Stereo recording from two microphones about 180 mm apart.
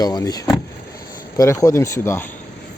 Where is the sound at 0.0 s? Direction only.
20° left (ahead or behind).